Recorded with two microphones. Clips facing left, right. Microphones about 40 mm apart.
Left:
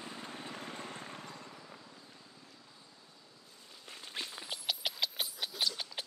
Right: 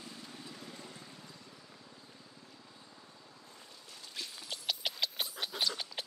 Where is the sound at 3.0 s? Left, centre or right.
Right.